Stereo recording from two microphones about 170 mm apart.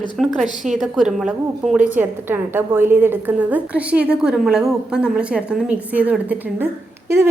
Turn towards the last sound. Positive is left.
turn(degrees=-15)  # may be behind; listen again after turning